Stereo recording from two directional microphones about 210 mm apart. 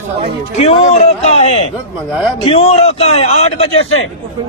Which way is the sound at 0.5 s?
30° left (ahead or behind).